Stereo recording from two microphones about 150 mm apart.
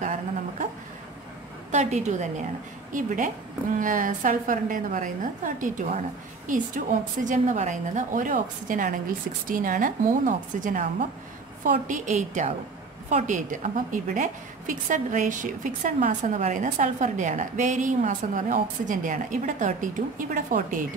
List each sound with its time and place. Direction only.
1.7 s a woman's voice: 50° right (ahead or behind)